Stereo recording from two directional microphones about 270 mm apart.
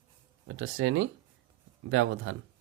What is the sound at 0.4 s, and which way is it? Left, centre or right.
Speech, right.